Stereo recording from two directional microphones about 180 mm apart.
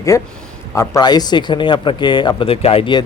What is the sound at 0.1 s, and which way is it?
Speech, 15° left (ahead or behind).